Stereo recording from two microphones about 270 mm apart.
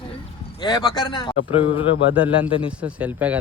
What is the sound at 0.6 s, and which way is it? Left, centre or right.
Speech, centre.